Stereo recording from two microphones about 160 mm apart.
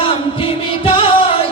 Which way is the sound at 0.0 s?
35° left (ahead or behind).